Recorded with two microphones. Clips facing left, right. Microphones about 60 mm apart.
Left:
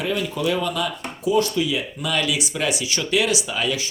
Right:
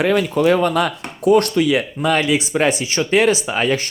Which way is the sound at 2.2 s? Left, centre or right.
Right.